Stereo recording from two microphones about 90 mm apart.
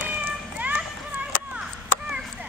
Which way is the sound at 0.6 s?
15° right (ahead or behind).